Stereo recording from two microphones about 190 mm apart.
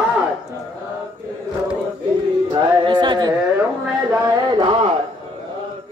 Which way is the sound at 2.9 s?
25° right (ahead or behind).